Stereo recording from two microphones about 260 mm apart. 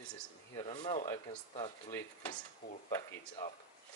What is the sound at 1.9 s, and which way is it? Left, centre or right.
Speech, centre.